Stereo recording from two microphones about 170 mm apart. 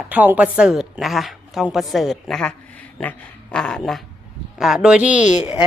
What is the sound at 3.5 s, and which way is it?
Speech, 5° left (ahead or behind).